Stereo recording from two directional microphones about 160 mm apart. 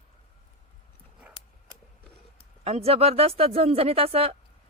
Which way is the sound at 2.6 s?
40° right (ahead or behind).